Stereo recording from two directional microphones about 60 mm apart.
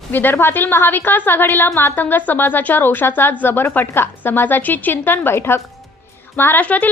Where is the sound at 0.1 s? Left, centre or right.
Left.